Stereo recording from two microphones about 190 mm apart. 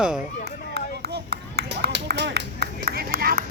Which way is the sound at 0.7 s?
60° right (ahead or behind).